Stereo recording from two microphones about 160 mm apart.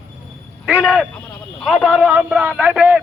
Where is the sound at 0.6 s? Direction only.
5° right (ahead or behind).